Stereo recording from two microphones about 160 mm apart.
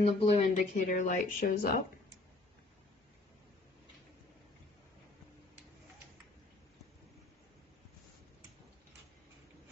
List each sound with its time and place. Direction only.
0.0 s speech: 40° left (ahead or behind); by 1.7 s 60° left (ahead or behind)